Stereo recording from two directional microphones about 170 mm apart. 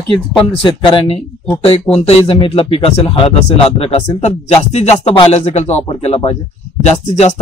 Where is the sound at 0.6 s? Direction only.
30° left (ahead or behind).